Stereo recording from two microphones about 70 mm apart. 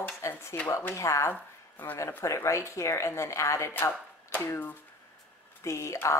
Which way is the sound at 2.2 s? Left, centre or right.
Left.